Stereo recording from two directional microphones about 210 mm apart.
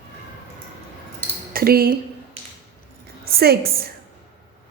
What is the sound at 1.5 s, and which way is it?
Speech, 45° right (ahead or behind).